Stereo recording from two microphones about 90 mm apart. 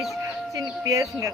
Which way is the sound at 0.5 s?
35° right (ahead or behind).